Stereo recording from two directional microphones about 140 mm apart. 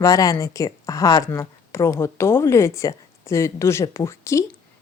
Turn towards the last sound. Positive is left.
turn(degrees=20)  # may be behind; listen again after turning